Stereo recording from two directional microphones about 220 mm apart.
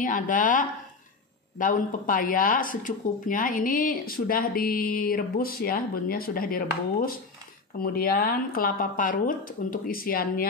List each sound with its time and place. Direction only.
0.0 s speech: 40° left (ahead or behind)